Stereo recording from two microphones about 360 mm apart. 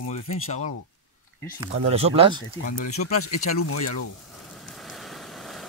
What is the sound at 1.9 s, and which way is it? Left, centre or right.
Speech, centre.